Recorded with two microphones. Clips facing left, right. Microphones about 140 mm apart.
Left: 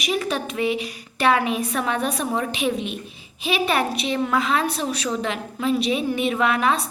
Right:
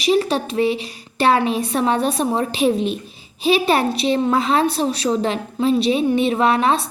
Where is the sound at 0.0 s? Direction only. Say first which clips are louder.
Right 7 dB; 30° right (ahead or behind).